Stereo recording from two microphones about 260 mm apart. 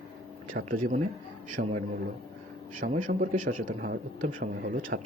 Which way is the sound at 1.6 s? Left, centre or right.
Right.